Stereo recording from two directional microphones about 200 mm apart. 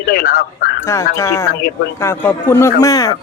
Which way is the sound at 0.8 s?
15° left (ahead or behind).